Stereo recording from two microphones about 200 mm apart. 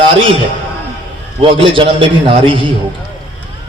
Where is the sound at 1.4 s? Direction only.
25° right (ahead or behind).